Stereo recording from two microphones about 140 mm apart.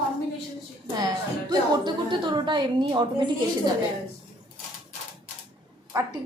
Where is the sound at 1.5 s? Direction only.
35° right (ahead or behind).